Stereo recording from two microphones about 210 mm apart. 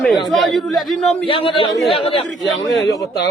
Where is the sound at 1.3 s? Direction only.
25° left (ahead or behind).